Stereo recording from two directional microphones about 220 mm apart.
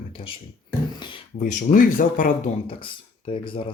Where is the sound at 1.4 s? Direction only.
35° left (ahead or behind).